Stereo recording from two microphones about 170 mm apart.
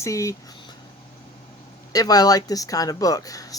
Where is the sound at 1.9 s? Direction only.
20° left (ahead or behind).